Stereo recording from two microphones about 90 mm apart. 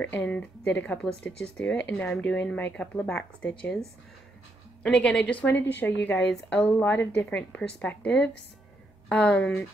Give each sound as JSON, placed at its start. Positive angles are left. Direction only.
{"t": 0.0, "sound": "speech", "side_deg": 15}
{"t": 4.8, "sound": "speech", "side_deg": 10}